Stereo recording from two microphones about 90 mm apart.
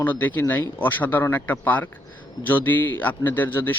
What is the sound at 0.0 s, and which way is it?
A man's voice, 20° left (ahead or behind).